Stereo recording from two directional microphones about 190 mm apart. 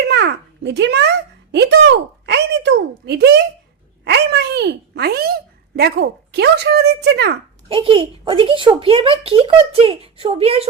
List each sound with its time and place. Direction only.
0.1 s a sound: 65° right (ahead or behind)
1.5 s a child's voice: 65° right (ahead or behind)
7.7 s speech: 25° right (ahead or behind)